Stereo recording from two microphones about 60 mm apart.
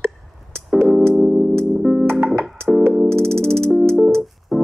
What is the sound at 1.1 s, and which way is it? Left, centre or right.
Music, centre.